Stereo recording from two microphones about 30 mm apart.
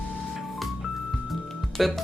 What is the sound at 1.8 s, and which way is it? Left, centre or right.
Speech, centre.